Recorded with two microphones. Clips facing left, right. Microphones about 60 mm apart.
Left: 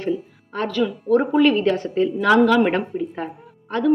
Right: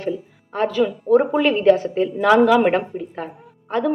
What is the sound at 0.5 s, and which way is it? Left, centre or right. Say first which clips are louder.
Speech: right 3 dB; centre.